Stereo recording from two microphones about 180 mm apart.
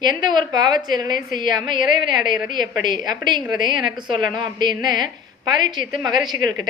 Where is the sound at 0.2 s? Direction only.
25° right (ahead or behind).